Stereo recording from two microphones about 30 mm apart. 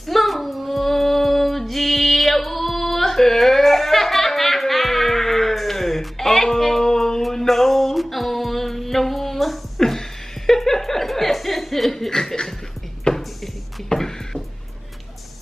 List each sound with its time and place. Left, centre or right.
0.0 s female singing: centre
7.3 s music: centre
9.8 s chuckle: centre
12.1 s chuckle: centre
13.1 s a sound: left
13.9 s music: centre